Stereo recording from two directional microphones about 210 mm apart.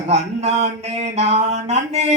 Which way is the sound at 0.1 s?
30° right (ahead or behind).